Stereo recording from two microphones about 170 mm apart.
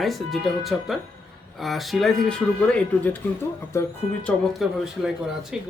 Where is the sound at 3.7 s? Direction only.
15° left (ahead or behind).